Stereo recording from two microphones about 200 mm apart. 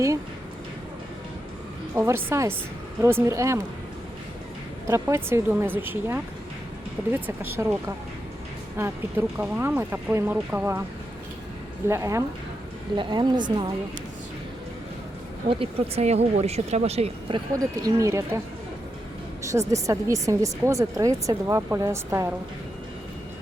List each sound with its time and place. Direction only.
2.0 s speech: 15° right (ahead or behind)
4.9 s speech: 15° right (ahead or behind)
8.8 s speech: 10° right (ahead or behind)
11.9 s speech: 15° right (ahead or behind)
15.4 s speech: 25° right (ahead or behind)
19.5 s speech: 15° right (ahead or behind)